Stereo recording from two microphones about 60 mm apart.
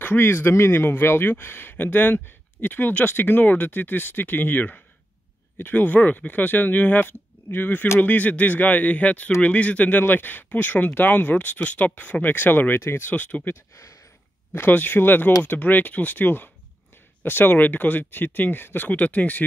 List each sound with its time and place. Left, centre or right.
0.0 s speech: left
13.1 s speech: left